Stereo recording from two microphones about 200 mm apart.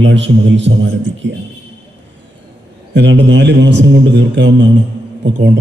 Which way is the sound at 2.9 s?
60° right (ahead or behind).